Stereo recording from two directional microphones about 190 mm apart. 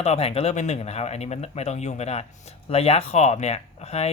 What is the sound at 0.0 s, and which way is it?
Speech, 35° left (ahead or behind).